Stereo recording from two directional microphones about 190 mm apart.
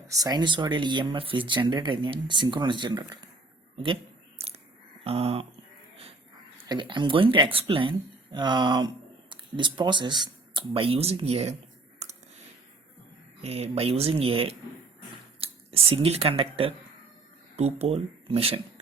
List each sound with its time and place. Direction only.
0.1 s speech: 20° right (ahead or behind)
5.0 s speech: 30° right (ahead or behind)
6.7 s speech: 25° right (ahead or behind)
12.0 s a sound: 35° right (ahead or behind)
13.4 s speech: 30° right (ahead or behind)